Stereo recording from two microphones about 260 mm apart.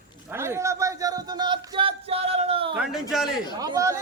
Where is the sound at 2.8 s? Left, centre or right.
Centre.